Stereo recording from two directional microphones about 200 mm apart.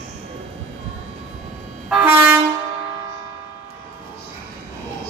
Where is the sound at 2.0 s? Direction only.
10° right (ahead or behind).